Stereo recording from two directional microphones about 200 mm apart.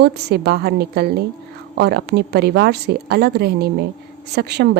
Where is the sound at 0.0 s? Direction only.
55° right (ahead or behind).